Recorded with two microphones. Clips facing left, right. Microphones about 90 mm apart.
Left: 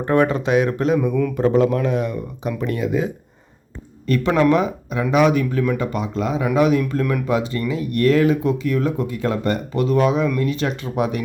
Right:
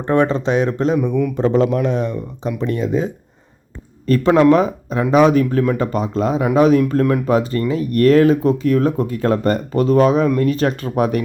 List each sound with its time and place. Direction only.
0.0 s speech: 25° right (ahead or behind)
0.9 s speech: 20° right (ahead or behind); by 11.2 s 45° right (ahead or behind)